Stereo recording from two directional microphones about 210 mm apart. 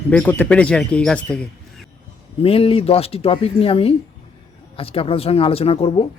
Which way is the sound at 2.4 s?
25° left (ahead or behind).